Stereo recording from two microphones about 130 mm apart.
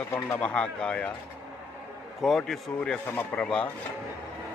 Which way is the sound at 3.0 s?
15° left (ahead or behind).